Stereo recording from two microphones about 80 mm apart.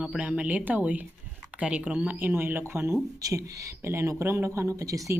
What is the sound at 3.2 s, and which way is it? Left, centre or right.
Speech, right.